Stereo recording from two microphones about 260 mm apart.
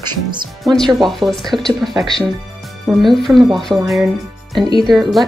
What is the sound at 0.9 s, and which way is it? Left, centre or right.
Speech, centre.